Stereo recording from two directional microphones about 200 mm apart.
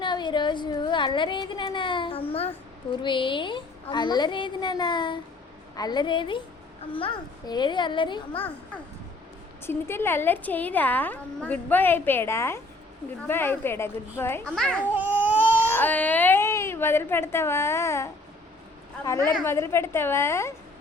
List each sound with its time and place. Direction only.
0.0 s speech: 25° left (ahead or behind)
9.6 s a woman's voice: 10° left (ahead or behind)
14.9 s baby cry: 10° right (ahead or behind)
15.7 s a woman's voice: 10° left (ahead or behind)
19.2 s a woman's voice: 10° left (ahead or behind)